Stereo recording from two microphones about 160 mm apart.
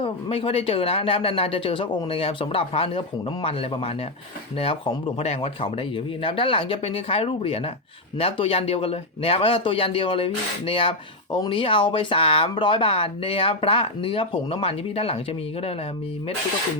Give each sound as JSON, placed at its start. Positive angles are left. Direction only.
{"t": 0.0, "sound": "speech", "side_deg": 35}